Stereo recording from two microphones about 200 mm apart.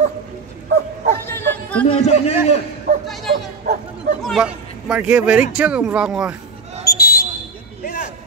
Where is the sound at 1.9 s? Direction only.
35° left (ahead or behind).